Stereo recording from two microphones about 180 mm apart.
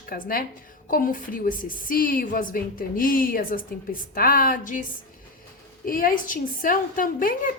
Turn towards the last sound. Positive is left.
turn(degrees=50)  # may be behind; listen again after turning